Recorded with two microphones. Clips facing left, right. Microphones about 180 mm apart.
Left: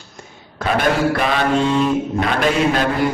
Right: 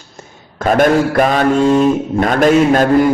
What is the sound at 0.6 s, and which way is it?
A man's voice, 45° right (ahead or behind).